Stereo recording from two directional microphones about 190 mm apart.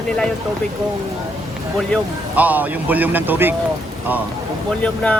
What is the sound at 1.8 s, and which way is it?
A man's voice, 5° right (ahead or behind).